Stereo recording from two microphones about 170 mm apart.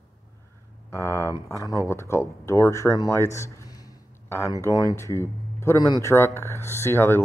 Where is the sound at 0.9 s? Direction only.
15° left (ahead or behind).